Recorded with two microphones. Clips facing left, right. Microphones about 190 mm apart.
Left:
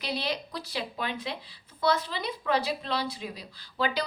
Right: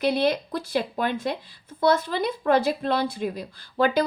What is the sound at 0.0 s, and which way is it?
Speech, 50° right (ahead or behind).